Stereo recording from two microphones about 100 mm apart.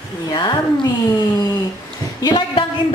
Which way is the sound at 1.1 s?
35° left (ahead or behind).